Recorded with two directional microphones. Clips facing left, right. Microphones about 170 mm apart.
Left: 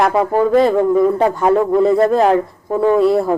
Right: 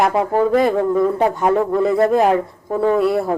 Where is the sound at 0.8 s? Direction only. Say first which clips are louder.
Left 3 dB; 15° left (ahead or behind).